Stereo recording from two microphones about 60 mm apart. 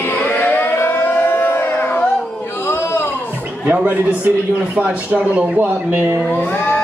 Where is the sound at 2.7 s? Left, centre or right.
Left.